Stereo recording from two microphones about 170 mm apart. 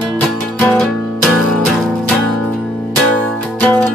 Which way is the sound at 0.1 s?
Centre (ahead or behind).